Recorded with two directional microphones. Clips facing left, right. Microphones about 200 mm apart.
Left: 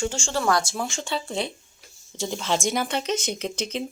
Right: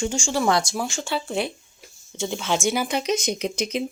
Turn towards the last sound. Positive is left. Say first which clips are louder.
# right 3 dB
turn(degrees=-15)  # may be behind; listen again after turning